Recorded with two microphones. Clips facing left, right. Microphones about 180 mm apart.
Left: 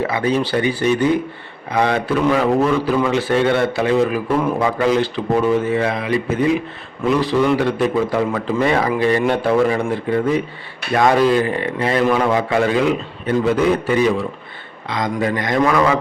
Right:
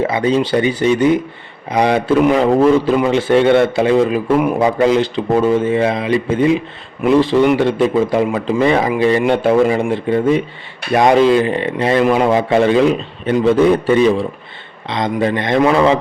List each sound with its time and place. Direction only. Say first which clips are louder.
0.0 s a man's voice: right 3 dB; 25° right (ahead or behind)